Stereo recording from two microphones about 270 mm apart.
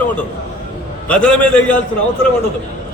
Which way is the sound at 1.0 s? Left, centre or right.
Centre.